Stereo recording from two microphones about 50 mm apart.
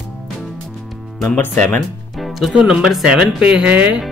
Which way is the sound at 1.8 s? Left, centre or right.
Centre.